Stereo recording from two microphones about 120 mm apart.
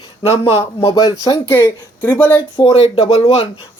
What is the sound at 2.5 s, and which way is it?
Speech, 45° left (ahead or behind).